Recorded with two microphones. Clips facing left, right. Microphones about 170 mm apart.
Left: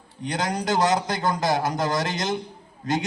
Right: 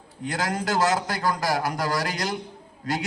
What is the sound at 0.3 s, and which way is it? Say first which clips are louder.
A man's voice: left 1 dB; 20° left (ahead or behind).